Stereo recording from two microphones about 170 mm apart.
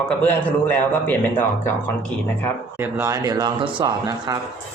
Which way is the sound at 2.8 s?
15° right (ahead or behind).